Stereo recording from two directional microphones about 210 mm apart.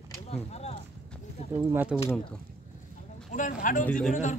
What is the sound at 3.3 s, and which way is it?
Speech, 35° left (ahead or behind).